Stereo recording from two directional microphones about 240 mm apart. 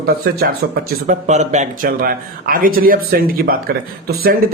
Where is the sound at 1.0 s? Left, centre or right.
Right.